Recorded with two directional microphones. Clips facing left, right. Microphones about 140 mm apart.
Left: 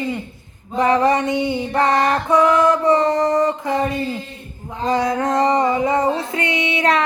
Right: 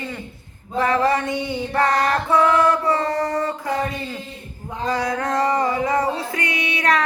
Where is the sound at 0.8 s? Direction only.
20° left (ahead or behind).